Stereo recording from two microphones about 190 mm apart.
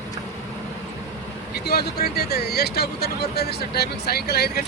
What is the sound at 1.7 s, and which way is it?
Speech, 55° left (ahead or behind).